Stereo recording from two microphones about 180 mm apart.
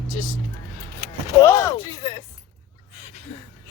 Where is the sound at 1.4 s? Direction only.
15° left (ahead or behind).